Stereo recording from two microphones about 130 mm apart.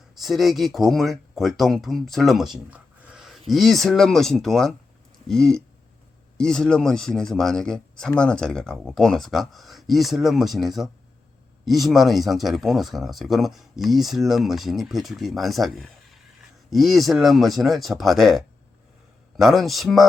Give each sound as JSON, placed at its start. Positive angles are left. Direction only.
{"t": 0.2, "sound": "speech", "side_deg": 0}